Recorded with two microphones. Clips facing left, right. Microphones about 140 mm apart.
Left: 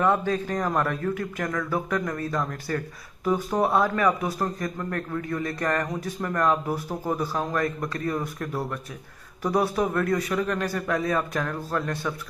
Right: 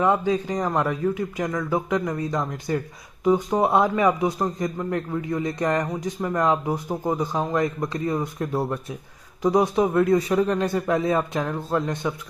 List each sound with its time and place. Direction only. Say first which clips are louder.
0.0 s a man's voice: right 2 dB; 15° right (ahead or behind)